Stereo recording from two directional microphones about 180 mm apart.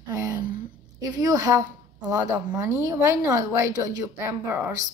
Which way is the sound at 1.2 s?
20° right (ahead or behind).